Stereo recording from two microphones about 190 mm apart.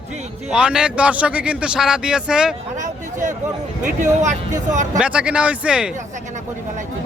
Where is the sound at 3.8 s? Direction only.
40° right (ahead or behind).